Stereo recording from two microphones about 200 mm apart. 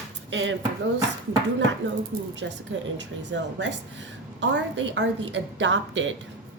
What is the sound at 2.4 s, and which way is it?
A woman's voice, 65° right (ahead or behind).